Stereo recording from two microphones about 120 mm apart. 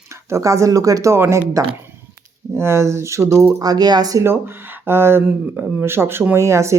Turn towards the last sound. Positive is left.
turn(degrees=-25)  # may be behind; listen again after turning